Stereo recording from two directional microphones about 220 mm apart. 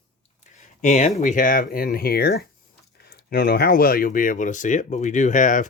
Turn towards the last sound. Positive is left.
turn(degrees=35)  # may be behind; listen again after turning